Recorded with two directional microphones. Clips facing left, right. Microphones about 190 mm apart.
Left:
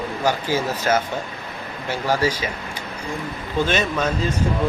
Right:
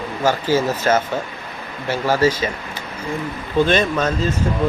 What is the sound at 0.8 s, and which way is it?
Speech, 10° left (ahead or behind).